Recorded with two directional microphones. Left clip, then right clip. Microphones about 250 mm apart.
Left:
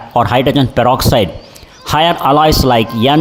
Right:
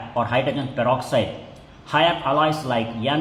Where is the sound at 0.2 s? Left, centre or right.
Left.